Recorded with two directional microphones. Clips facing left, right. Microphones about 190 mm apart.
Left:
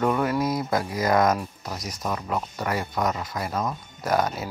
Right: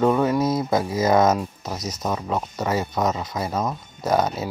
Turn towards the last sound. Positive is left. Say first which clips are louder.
# right 3 dB
turn(degrees=-20)  # may be behind; listen again after turning